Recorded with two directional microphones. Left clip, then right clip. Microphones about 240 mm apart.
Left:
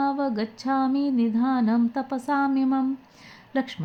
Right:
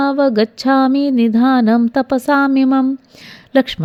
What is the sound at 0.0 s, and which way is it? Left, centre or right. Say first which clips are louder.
Music: right 12 dB; right.